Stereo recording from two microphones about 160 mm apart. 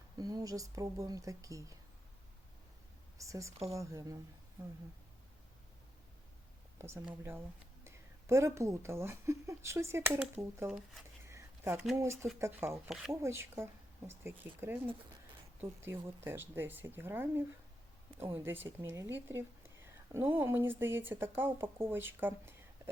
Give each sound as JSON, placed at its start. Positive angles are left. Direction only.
{"t": 0.2, "sound": "speech", "side_deg": -25}
{"t": 3.2, "sound": "speech", "side_deg": -20}
{"t": 6.7, "sound": "a woman's voice", "side_deg": -15}
{"t": 11.3, "sound": "a sound", "side_deg": -15}
{"t": 11.9, "sound": "a woman's voice", "side_deg": -15}
{"t": 15.8, "sound": "a woman's voice", "side_deg": -15}